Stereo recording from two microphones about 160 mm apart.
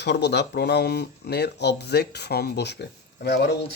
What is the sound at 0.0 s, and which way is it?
Speech, 90° left.